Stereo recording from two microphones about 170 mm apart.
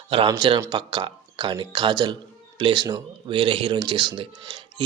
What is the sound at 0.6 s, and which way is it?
A man's voice, 25° right (ahead or behind).